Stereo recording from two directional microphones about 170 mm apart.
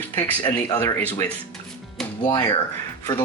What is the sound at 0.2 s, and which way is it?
Speech, 20° left (ahead or behind).